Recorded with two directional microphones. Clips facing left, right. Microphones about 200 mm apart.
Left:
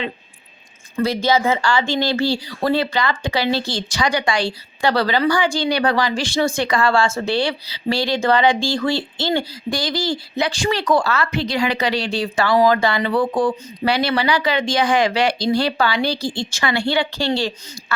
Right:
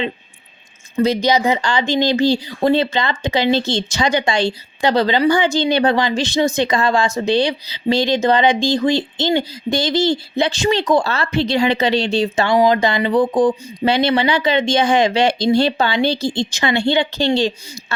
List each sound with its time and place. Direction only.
0.9 s speech: 20° right (ahead or behind)